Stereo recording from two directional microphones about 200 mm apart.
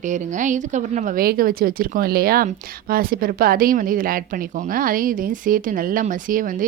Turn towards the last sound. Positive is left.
turn(degrees=-45)  # may be behind; listen again after turning